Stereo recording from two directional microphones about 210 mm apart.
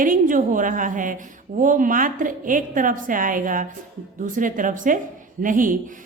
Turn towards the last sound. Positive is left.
turn(degrees=-40)  # may be behind; listen again after turning